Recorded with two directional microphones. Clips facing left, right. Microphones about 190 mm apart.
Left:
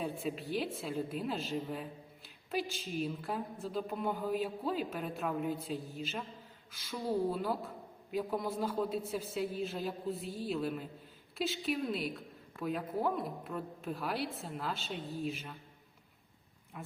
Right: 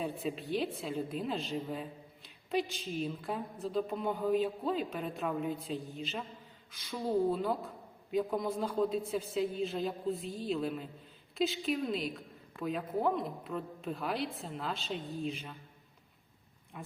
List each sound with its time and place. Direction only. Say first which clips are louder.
0.0 s a woman's voice: right 1 dB; centre (ahead or behind)
16.7 s a woman's voice: even; centre (ahead or behind)